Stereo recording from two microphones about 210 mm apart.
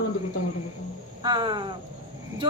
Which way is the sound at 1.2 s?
20° right (ahead or behind).